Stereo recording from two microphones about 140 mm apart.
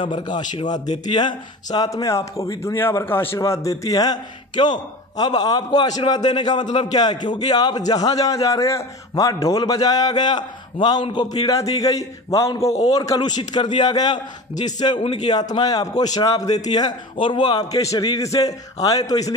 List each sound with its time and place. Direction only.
0.0 s a man's voice: 35° left (ahead or behind)